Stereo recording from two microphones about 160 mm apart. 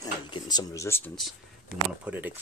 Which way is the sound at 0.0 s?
25° left (ahead or behind).